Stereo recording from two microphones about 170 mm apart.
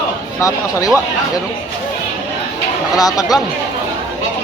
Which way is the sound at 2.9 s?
20° left (ahead or behind).